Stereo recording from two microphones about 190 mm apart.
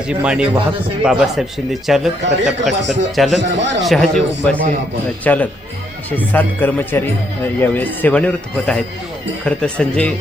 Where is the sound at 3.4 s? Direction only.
70° right (ahead or behind).